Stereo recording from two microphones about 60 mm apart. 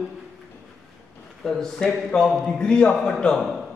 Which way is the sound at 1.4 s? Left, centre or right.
Centre.